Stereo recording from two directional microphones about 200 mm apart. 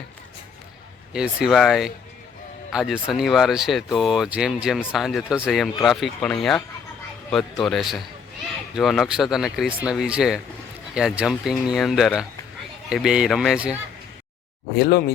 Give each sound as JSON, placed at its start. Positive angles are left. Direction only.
{"t": 1.1, "sound": "speech", "side_deg": -5}
{"t": 14.8, "sound": "speech", "side_deg": 50}